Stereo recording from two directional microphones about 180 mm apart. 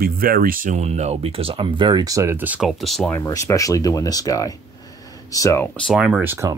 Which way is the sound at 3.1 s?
15° left (ahead or behind).